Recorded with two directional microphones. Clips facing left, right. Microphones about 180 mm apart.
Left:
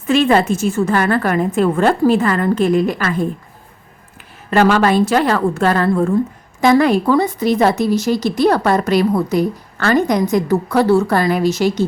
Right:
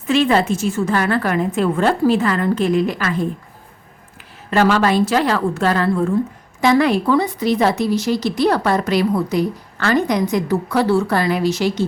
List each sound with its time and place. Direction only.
0.1 s speech: 50° left (ahead or behind)
4.5 s speech: 55° left (ahead or behind)